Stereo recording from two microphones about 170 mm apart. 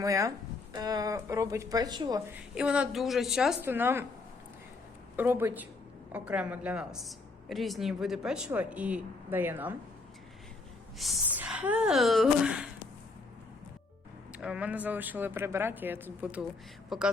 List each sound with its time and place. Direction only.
0.0 s speech: 20° right (ahead or behind)
2.6 s a woman's voice: 5° right (ahead or behind)
5.1 s a woman's voice: 10° right (ahead or behind)
10.9 s a woman's voice: centre (ahead or behind)
14.3 s a woman's voice: 5° right (ahead or behind)